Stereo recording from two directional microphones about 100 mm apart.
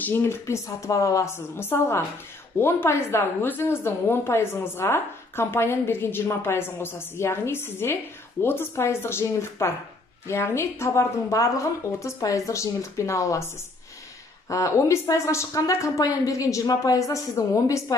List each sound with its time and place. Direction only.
0.0 s a woman's voice: 25° left (ahead or behind)
14.5 s a woman's voice: 30° left (ahead or behind)